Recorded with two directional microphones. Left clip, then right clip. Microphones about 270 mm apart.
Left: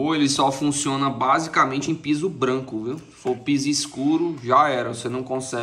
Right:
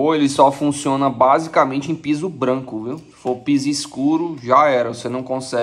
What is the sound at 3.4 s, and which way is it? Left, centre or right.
Speech, centre.